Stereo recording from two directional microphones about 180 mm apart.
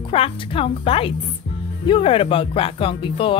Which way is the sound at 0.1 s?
30° left (ahead or behind).